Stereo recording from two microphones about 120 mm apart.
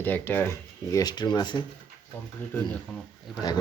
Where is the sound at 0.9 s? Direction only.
30° left (ahead or behind).